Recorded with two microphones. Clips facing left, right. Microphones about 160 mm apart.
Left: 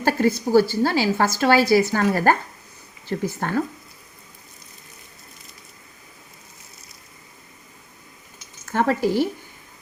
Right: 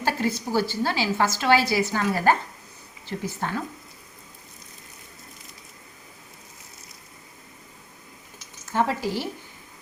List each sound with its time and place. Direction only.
0.0 s a woman's voice: 45° left (ahead or behind)
8.7 s speech: 55° left (ahead or behind)